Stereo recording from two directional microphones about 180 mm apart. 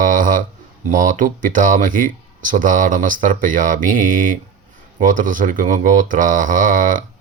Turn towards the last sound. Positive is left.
turn(degrees=-45)  # may be behind; listen again after turning